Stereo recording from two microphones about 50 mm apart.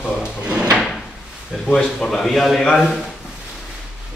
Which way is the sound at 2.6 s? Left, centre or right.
Centre.